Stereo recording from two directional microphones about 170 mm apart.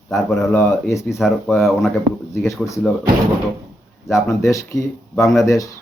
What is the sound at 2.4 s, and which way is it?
Speech, 15° left (ahead or behind).